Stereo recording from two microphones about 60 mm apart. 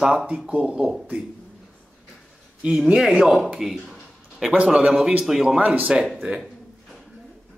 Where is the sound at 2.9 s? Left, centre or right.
Centre.